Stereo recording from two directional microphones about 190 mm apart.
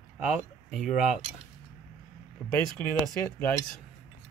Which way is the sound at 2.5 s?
10° left (ahead or behind).